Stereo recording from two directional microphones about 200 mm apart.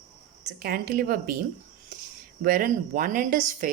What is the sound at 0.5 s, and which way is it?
Speech, 45° right (ahead or behind).